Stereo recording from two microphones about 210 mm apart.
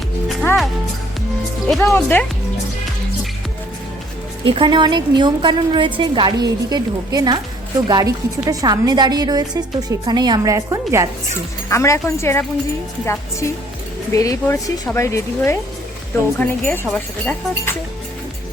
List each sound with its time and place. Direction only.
0.3 s music: centre (ahead or behind)
1.6 s speech: 10° left (ahead or behind)
4.4 s a woman's voice: 20° right (ahead or behind)
11.7 s speech: 15° left (ahead or behind)
14.1 s speech: 15° left (ahead or behind)